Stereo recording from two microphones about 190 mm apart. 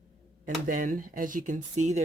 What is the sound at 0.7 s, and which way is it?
Speech, 45° right (ahead or behind).